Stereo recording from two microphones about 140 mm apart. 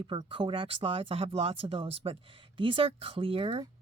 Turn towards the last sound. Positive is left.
turn(degrees=-40)  # may be behind; listen again after turning